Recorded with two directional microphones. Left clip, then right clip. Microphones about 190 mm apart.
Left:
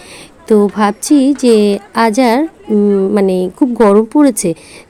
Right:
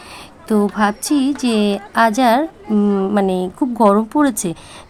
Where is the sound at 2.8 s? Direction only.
5° left (ahead or behind).